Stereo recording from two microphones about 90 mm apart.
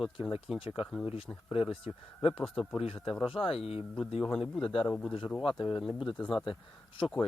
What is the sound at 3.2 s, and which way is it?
Speech, 80° left.